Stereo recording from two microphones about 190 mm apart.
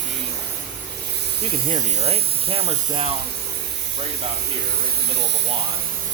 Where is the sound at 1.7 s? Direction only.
30° right (ahead or behind).